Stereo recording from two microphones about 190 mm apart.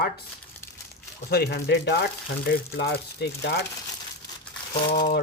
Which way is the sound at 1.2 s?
55° left (ahead or behind).